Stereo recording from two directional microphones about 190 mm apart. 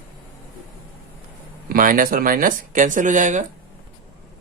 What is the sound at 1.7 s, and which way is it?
Speech, 45° right (ahead or behind).